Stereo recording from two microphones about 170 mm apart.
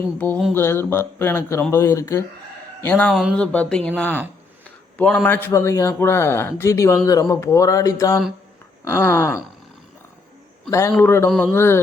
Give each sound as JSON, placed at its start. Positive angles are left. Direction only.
{"t": 0.2, "sound": "a man's voice", "side_deg": 10}
{"t": 3.1, "sound": "a man's voice", "side_deg": 0}
{"t": 10.7, "sound": "a man's voice", "side_deg": 15}
{"t": 11.3, "sound": "speech", "side_deg": 0}
{"t": 11.5, "sound": "a man's voice", "side_deg": 15}